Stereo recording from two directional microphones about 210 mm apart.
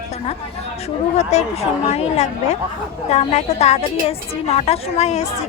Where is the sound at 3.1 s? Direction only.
30° left (ahead or behind).